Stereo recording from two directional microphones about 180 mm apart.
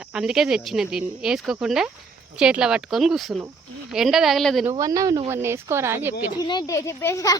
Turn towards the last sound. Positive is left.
turn(degrees=15)  # may be behind; listen again after turning